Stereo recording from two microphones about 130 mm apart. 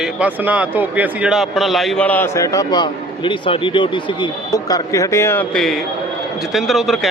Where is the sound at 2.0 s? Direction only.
15° left (ahead or behind).